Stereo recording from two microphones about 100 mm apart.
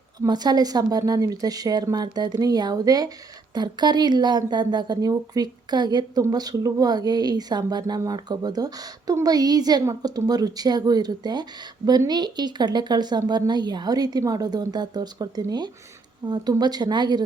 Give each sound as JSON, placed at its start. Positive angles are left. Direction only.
{"t": 0.2, "sound": "a woman's voice", "side_deg": -45}